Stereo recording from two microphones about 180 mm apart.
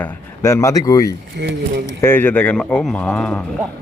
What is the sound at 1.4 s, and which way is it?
Speech, 70° right (ahead or behind).